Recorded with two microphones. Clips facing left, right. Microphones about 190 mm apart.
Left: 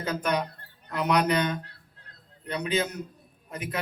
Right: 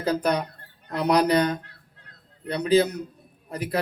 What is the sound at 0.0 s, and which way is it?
A man's voice, 35° right (ahead or behind).